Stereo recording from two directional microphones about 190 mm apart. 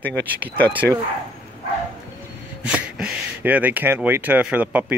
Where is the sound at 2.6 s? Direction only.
5° right (ahead or behind).